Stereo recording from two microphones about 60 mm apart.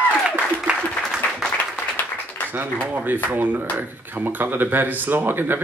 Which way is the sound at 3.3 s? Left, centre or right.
Right.